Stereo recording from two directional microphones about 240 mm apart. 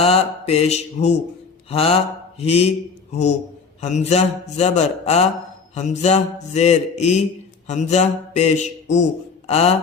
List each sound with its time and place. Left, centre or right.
0.0 s mantra: left
1.7 s speech: left